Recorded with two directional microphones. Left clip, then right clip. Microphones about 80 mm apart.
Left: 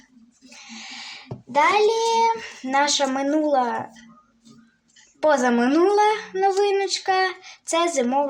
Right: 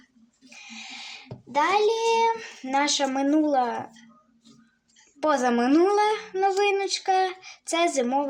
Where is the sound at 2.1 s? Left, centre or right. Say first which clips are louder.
Left 3 dB; right.